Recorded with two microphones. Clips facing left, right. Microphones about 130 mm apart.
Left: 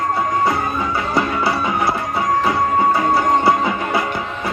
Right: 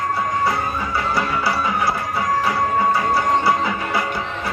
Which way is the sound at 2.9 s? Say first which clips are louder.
Left 3 dB; 25° left (ahead or behind).